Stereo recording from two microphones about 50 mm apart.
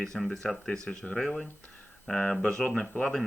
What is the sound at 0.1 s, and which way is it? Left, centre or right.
Speech, centre.